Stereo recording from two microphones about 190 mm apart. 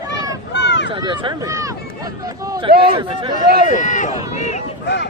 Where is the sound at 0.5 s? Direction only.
70° left (ahead or behind).